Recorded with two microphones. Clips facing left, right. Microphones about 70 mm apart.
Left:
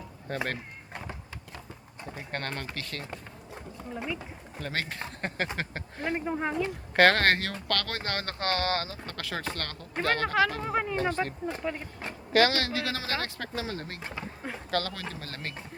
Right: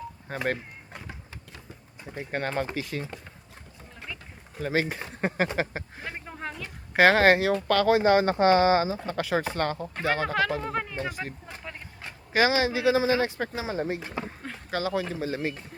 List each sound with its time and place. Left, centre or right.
0.3 s speech: centre
2.1 s speech: centre
4.5 s speech: centre
6.1 s speech: centre
6.9 s speech: centre
10.6 s speech: centre
10.9 s speech: centre
12.3 s speech: centre